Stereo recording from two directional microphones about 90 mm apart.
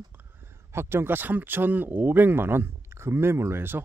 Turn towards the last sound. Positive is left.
turn(degrees=-25)  # may be behind; listen again after turning